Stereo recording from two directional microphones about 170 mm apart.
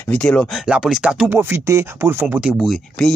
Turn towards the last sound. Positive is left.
turn(degrees=0)  # may be behind; listen again after turning